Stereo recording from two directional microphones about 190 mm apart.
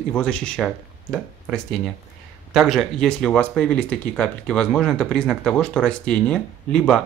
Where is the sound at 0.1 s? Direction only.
5° left (ahead or behind).